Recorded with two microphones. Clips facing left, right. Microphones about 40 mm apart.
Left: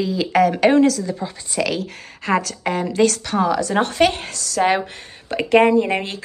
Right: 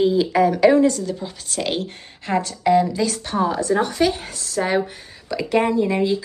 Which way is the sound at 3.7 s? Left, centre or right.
Left.